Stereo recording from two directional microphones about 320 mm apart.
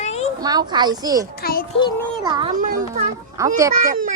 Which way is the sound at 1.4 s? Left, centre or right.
Left.